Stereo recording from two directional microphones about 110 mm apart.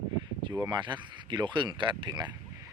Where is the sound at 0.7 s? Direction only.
45° right (ahead or behind).